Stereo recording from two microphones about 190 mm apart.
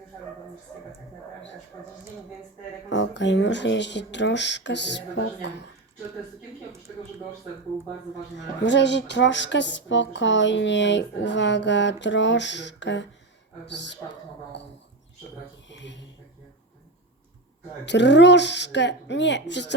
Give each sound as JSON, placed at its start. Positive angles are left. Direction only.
{"t": 2.9, "sound": "speech", "side_deg": 70}
{"t": 8.6, "sound": "speech", "side_deg": 70}
{"t": 15.7, "sound": "a sound", "side_deg": 70}
{"t": 17.8, "sound": "speech", "side_deg": 65}